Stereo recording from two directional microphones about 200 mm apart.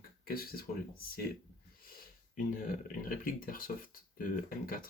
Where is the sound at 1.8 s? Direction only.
45° left (ahead or behind).